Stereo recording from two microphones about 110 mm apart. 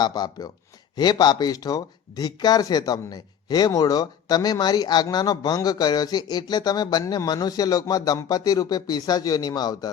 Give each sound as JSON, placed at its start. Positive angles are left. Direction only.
{"t": 0.0, "sound": "speech", "side_deg": 35}